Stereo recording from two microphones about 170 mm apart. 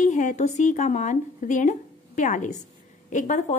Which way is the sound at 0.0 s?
45° left (ahead or behind).